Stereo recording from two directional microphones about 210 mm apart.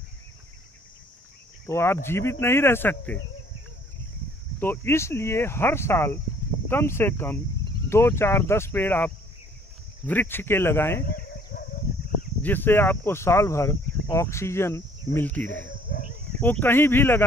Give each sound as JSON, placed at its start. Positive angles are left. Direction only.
{"t": 1.7, "sound": "speech", "side_deg": 10}
{"t": 4.6, "sound": "speech", "side_deg": 10}
{"t": 11.1, "sound": "a sound", "side_deg": 45}
{"t": 12.4, "sound": "speech", "side_deg": 10}
{"t": 15.9, "sound": "a sound", "side_deg": 50}
{"t": 16.3, "sound": "speech", "side_deg": 10}